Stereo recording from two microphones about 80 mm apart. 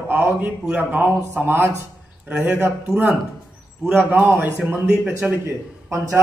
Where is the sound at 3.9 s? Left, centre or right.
Right.